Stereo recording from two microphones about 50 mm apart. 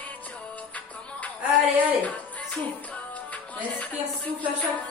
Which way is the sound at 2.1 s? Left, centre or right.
Left.